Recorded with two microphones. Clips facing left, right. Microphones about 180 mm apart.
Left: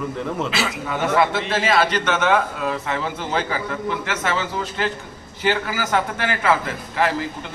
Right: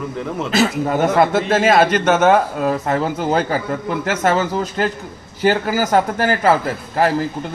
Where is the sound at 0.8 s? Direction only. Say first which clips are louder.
Right 1 dB; 40° right (ahead or behind).